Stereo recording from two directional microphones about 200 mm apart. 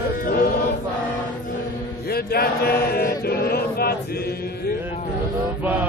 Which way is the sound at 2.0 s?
50° left (ahead or behind).